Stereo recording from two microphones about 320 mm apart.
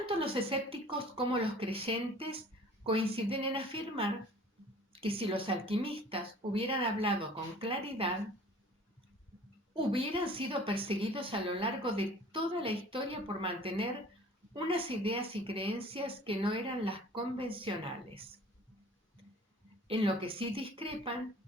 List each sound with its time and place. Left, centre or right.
0.0 s a woman's voice: centre
9.7 s a woman's voice: centre
19.9 s a woman's voice: centre